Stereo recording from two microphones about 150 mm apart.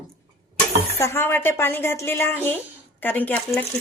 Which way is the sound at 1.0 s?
15° left (ahead or behind).